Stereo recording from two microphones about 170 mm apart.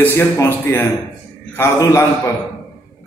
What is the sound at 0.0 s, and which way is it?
A man's voice, 15° left (ahead or behind).